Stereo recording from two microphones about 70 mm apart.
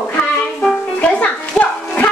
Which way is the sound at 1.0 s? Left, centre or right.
Centre.